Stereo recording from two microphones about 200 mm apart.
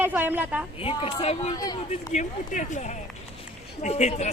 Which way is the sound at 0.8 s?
30° left (ahead or behind).